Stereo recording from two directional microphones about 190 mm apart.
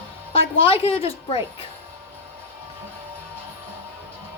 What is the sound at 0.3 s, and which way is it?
A woman's voice, 30° left (ahead or behind).